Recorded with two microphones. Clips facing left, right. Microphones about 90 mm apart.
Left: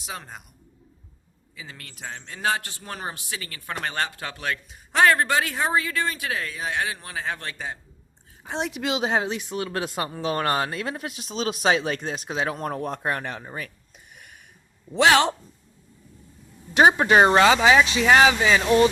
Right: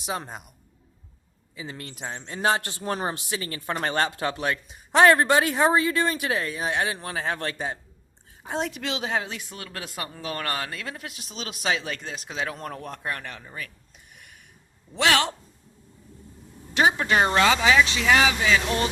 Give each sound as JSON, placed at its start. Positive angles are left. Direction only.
{"t": 0.0, "sound": "speech", "side_deg": -25}
{"t": 1.5, "sound": "speech", "side_deg": -25}
{"t": 7.0, "sound": "speech", "side_deg": -40}
{"t": 8.4, "sound": "a woman's voice", "side_deg": 0}
{"t": 8.8, "sound": "speech", "side_deg": 20}
{"t": 14.9, "sound": "speech", "side_deg": 25}
{"t": 16.7, "sound": "speech", "side_deg": 25}